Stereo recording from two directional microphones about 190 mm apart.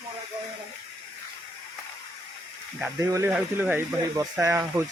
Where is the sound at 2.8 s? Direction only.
15° right (ahead or behind).